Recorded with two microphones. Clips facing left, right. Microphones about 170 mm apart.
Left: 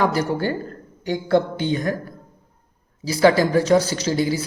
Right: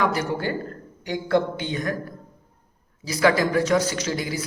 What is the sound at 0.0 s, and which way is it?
A man's voice, 35° left (ahead or behind).